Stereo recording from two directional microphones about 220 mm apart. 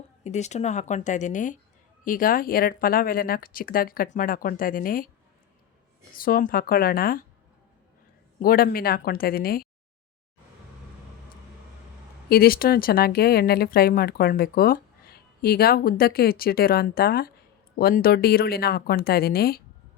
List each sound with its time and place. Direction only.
0.3 s speech: 30° left (ahead or behind)
6.1 s speech: 40° left (ahead or behind)
8.4 s speech: 40° left (ahead or behind)
12.3 s speech: 40° left (ahead or behind)